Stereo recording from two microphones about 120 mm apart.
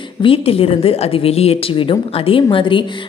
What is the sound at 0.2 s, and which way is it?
A woman's voice, 50° left (ahead or behind).